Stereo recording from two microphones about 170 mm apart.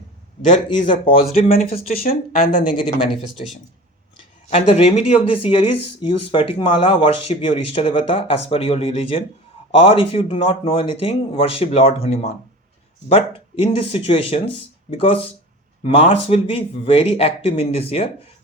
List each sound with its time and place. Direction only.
1.5 s speech: 60° left (ahead or behind)
2.6 s speech: 30° left (ahead or behind)
4.4 s speech: 35° left (ahead or behind)